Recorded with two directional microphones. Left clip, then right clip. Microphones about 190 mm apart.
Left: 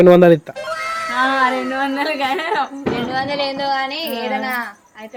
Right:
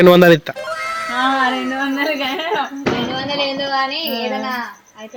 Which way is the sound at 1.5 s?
Centre (ahead or behind).